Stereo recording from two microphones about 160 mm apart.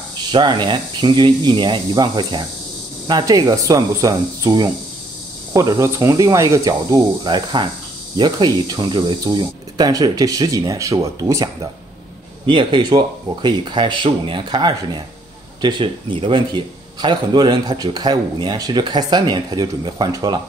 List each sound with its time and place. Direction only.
0.2 s speech: 30° right (ahead or behind)